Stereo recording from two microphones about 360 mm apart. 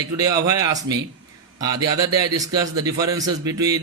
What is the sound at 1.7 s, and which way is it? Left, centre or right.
Speech, right.